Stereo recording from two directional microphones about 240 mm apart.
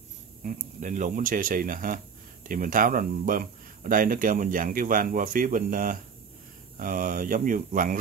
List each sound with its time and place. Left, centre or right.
0.4 s speech: right